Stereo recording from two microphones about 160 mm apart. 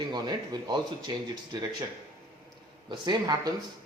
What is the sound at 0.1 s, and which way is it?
Speech, 25° right (ahead or behind).